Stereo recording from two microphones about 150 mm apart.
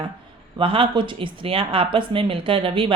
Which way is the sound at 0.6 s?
35° right (ahead or behind).